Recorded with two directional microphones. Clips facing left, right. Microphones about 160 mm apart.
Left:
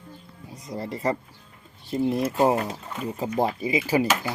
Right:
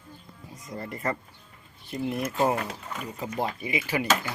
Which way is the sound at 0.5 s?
35° left (ahead or behind).